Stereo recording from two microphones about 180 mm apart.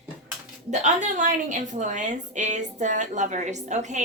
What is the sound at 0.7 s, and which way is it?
A woman's voice, 45° right (ahead or behind).